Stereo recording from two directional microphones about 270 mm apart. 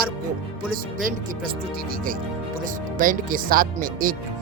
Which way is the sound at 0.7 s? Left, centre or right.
Right.